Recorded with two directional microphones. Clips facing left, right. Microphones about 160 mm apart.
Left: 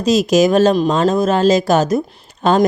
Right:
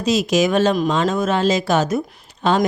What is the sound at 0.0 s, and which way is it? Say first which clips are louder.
Speech: left 5 dB; 40° left (ahead or behind).